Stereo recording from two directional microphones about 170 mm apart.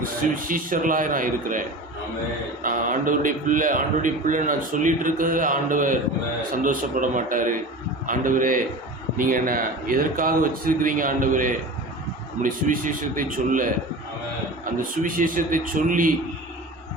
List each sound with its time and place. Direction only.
0.4 s a man's voice: 55° right (ahead or behind)
2.6 s a man's voice: 50° right (ahead or behind)